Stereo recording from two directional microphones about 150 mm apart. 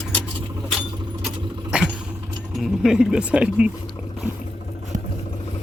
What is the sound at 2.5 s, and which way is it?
Speech, centre (ahead or behind).